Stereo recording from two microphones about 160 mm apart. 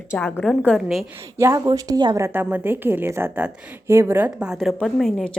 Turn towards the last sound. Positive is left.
turn(degrees=5)  # may be behind; listen again after turning